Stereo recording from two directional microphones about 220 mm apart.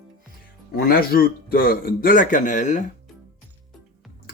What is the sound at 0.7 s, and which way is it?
Speech, 40° left (ahead or behind).